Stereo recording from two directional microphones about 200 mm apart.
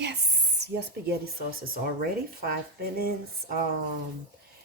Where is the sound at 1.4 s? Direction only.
50° right (ahead or behind).